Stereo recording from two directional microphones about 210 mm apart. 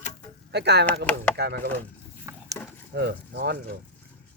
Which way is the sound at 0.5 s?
55° right (ahead or behind).